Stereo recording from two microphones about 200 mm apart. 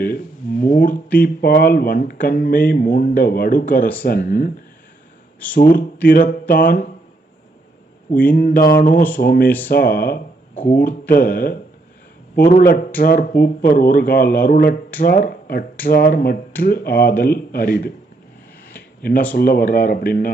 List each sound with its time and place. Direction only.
0.6 s speech: 45° left (ahead or behind)
5.5 s speech: 45° left (ahead or behind)
8.3 s speech: 45° left (ahead or behind)
19.3 s speech: 50° left (ahead or behind)